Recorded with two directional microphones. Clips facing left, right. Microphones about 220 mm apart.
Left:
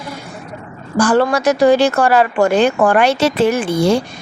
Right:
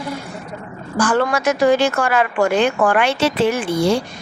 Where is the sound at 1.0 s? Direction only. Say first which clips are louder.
Left 4 dB; 35° left (ahead or behind).